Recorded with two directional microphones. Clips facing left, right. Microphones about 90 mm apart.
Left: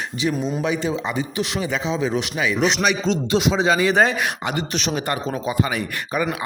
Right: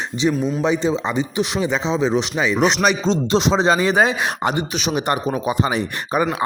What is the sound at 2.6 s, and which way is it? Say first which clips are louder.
Speech: right 2 dB; 40° right (ahead or behind).